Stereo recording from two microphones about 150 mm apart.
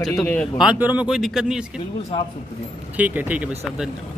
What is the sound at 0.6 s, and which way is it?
Speech, 10° right (ahead or behind).